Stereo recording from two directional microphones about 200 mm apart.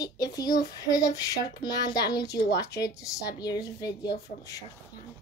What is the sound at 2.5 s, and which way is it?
Speech, 55° left (ahead or behind).